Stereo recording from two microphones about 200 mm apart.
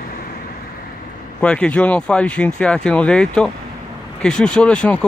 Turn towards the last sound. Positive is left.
turn(degrees=5)  # may be behind; listen again after turning